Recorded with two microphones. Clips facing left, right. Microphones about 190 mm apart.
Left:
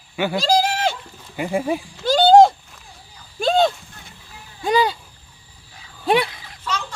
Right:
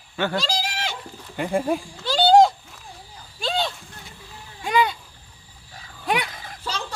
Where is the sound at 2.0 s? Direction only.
45° left (ahead or behind).